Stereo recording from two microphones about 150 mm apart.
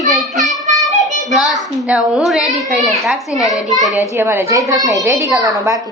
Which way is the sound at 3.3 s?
25° left (ahead or behind).